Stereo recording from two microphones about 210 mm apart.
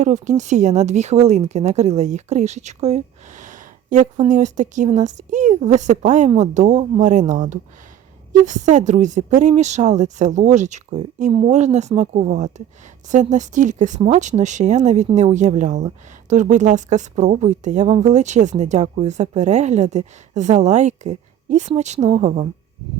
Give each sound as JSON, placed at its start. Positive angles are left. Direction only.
{"t": 0.0, "sound": "speech", "side_deg": -35}